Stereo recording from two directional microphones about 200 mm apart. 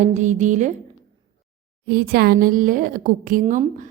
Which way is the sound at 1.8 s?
50° right (ahead or behind).